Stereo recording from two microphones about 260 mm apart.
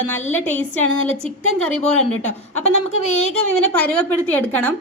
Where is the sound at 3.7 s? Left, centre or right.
Centre.